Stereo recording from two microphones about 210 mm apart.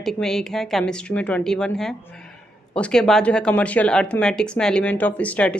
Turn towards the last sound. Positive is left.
turn(degrees=5)  # may be behind; listen again after turning